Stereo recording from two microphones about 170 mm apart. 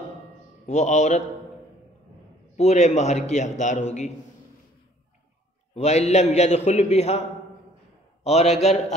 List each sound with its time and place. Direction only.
0.7 s a man's voice: 45° left (ahead or behind)
2.5 s a man's voice: 40° left (ahead or behind)
5.8 s a man's voice: 40° left (ahead or behind)